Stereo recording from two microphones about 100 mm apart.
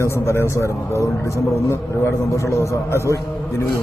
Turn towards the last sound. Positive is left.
turn(degrees=30)  # may be behind; listen again after turning